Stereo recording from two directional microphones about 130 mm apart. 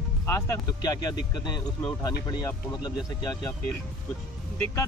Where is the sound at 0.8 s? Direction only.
35° left (ahead or behind).